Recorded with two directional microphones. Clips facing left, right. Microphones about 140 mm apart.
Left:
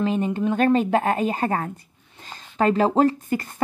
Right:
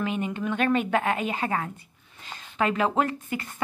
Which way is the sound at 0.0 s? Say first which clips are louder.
Left 6 dB; 35° left (ahead or behind).